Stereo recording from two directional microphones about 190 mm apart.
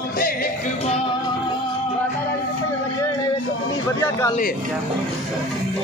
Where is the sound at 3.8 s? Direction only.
15° left (ahead or behind).